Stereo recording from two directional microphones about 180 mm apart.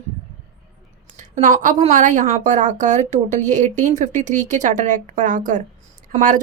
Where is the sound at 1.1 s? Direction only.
45° right (ahead or behind).